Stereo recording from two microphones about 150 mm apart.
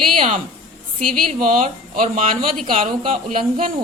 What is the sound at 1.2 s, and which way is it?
Speech, 60° right (ahead or behind).